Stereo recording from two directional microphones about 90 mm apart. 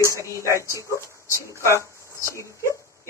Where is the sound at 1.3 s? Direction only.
30° left (ahead or behind).